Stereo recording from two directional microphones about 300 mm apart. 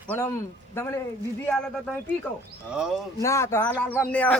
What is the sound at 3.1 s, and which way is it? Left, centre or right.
Speech, centre.